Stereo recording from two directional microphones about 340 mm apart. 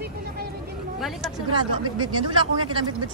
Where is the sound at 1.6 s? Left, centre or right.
Centre.